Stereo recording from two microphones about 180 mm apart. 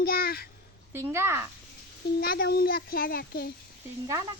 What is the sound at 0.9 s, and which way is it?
Speech, 15° right (ahead or behind).